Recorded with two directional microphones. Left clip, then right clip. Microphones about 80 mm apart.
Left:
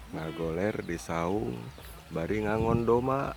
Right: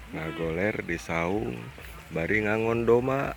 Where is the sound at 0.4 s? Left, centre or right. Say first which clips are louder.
Right 3 dB; left.